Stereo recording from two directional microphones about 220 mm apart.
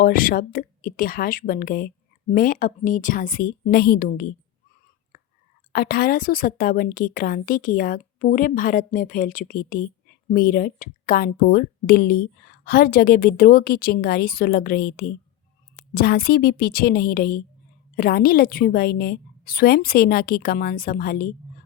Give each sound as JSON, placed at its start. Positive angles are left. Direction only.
{"t": 0.0, "sound": "a woman's voice", "side_deg": 40}
{"t": 5.7, "sound": "a woman's voice", "side_deg": 45}